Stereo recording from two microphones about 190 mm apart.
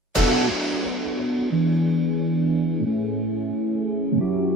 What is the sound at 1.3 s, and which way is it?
Music, centre (ahead or behind).